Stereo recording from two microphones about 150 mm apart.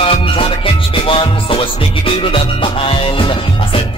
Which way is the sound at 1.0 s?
35° left (ahead or behind).